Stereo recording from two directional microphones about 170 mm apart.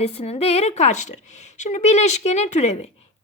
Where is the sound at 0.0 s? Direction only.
40° left (ahead or behind).